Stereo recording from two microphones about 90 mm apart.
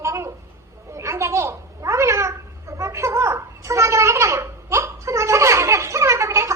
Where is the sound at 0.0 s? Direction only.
35° right (ahead or behind).